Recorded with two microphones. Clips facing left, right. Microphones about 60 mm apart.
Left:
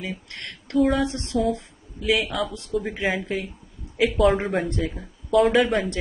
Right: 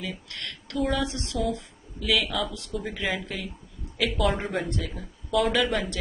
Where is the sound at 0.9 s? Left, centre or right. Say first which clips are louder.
Left 5 dB; left.